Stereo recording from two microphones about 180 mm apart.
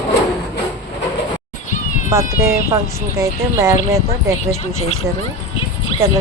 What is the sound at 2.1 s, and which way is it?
Speech, 15° right (ahead or behind).